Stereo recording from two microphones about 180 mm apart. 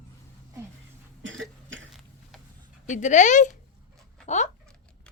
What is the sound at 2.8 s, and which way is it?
Speech, 40° left (ahead or behind).